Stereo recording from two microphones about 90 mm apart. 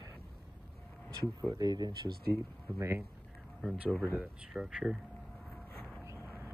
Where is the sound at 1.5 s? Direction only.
45° right (ahead or behind).